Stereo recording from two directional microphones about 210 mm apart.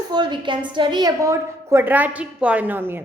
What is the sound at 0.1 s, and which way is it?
A woman's voice, 20° right (ahead or behind).